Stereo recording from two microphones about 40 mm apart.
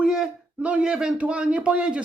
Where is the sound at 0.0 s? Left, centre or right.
Centre.